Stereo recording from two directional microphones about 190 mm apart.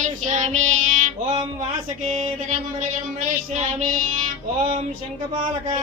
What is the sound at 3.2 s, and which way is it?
Child singing, 40° right (ahead or behind).